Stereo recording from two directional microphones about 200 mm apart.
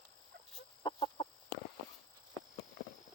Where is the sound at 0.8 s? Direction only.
25° left (ahead or behind).